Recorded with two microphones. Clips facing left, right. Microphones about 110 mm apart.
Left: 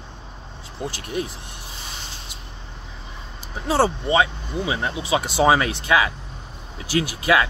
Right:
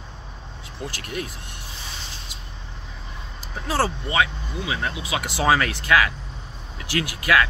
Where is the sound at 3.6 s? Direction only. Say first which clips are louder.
Left 4 dB; 25° left (ahead or behind).